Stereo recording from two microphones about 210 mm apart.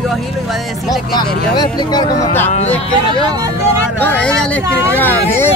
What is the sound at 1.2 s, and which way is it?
Speech, 20° left (ahead or behind).